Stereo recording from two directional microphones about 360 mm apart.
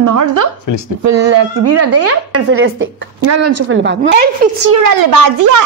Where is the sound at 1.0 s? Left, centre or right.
Right.